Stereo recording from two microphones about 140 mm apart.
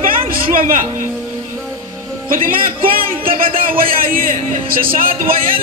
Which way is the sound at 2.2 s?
80° right.